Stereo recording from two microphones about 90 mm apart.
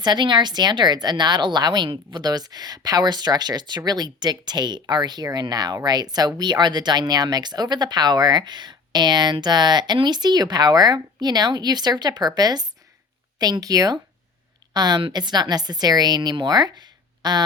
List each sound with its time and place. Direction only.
0.0 s speech: 55° right (ahead or behind)